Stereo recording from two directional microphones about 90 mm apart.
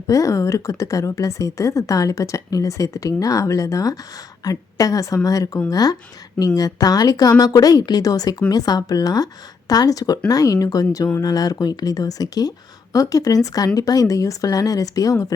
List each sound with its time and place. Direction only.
0.1 s a woman's voice: 35° left (ahead or behind)